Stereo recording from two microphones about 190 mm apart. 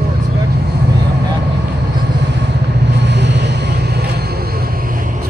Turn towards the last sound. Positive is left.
turn(degrees=-60)  # may be behind; listen again after turning